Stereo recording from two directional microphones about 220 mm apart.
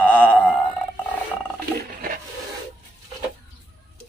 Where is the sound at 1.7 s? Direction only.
40° right (ahead or behind).